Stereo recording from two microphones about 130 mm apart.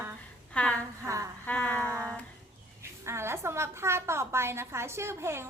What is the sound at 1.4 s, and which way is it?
Child singing, 10° left (ahead or behind).